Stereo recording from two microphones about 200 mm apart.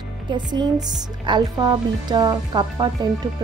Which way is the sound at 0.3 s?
20° right (ahead or behind).